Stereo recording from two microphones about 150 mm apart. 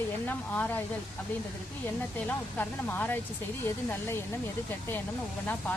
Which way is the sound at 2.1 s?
10° left (ahead or behind).